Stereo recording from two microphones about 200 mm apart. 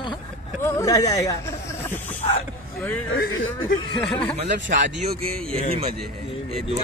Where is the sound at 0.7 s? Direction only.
15° left (ahead or behind).